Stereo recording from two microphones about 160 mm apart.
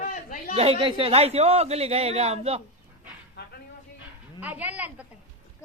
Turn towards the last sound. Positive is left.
turn(degrees=-10)  # may be behind; listen again after turning